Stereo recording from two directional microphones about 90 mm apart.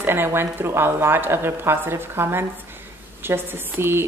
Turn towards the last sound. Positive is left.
turn(degrees=-25)  # may be behind; listen again after turning